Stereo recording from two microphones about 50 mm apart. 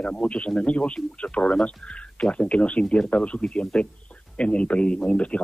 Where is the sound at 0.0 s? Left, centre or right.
Left.